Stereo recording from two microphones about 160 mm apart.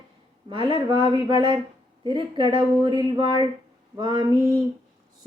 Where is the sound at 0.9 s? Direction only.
35° right (ahead or behind).